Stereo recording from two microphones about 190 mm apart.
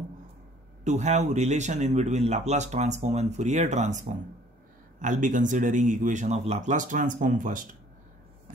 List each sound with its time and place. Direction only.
0.8 s a man's voice: 35° right (ahead or behind)